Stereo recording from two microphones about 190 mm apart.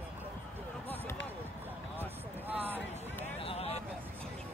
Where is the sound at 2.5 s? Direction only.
10° right (ahead or behind).